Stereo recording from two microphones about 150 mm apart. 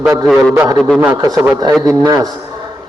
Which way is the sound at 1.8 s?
25° right (ahead or behind).